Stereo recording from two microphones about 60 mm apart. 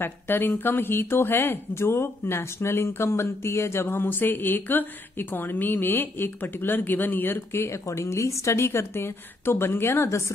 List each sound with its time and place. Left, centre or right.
0.0 s speech: left